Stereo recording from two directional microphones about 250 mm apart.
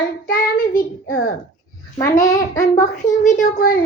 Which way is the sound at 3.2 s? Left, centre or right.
Left.